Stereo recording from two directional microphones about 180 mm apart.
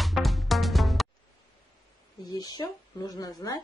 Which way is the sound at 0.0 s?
Centre (ahead or behind).